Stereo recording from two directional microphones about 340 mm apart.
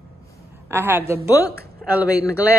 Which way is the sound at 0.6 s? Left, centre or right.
Centre.